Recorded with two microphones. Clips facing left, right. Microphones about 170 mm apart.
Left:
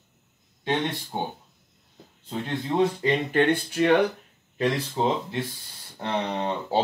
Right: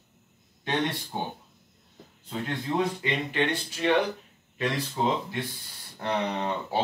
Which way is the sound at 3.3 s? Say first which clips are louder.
Left 6 dB; 55° left (ahead or behind).